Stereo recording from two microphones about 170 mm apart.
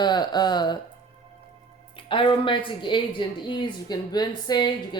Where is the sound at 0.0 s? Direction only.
25° left (ahead or behind).